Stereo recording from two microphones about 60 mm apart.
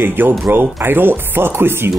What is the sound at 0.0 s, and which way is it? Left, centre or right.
Speech, right.